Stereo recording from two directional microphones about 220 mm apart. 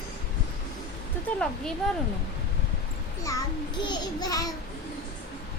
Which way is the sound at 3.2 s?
15° left (ahead or behind).